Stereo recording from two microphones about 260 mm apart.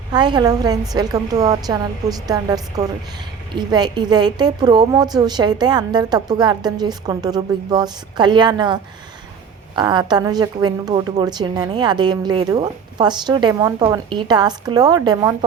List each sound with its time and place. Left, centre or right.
0.1 s a woman's voice: centre